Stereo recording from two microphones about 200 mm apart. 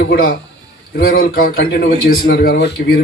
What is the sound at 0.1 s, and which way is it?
A man's voice, 50° left (ahead or behind).